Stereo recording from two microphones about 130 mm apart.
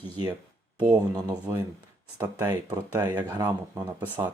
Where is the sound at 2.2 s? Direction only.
30° right (ahead or behind).